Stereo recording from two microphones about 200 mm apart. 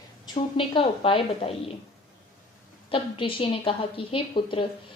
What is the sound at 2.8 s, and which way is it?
A woman's voice, 25° left (ahead or behind).